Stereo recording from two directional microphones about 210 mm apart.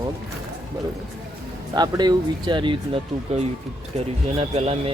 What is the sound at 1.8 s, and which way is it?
Speech, 20° right (ahead or behind).